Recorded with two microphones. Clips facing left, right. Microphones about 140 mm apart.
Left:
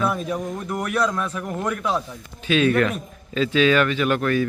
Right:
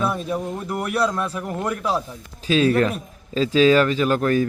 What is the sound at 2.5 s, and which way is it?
A man's voice, 35° right (ahead or behind).